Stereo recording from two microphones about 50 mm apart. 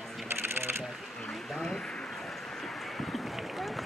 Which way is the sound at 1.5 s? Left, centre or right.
Centre.